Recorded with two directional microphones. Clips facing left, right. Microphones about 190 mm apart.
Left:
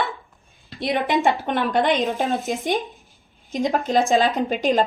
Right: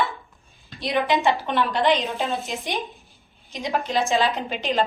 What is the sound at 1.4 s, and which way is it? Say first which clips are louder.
Speech: left 2 dB; 50° left (ahead or behind).